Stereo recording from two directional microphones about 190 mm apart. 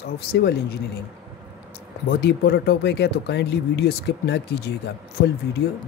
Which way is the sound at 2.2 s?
60° left (ahead or behind).